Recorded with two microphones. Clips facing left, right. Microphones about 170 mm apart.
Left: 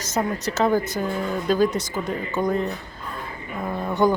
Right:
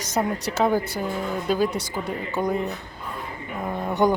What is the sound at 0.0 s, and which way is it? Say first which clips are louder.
Speech: even; 15° right (ahead or behind).